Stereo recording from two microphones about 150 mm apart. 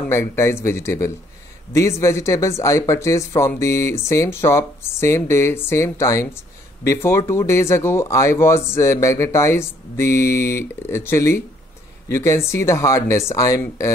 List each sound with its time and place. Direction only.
0.1 s speech: 20° left (ahead or behind)